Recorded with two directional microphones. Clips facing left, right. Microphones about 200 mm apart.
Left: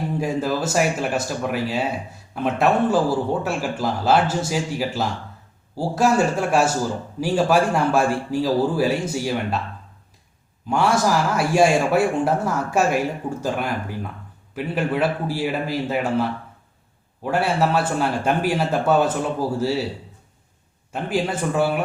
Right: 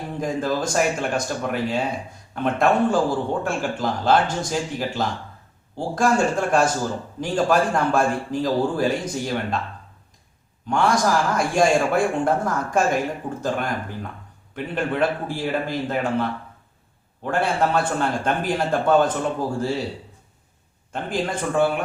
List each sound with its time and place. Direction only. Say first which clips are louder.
0.2 s a man's voice: right 1 dB; 5° left (ahead or behind)
10.7 s a man's voice: left 1 dB; 5° left (ahead or behind)
14.5 s a man's voice: left 2 dB; 5° left (ahead or behind)
20.9 s a man's voice: left 2 dB; 5° left (ahead or behind)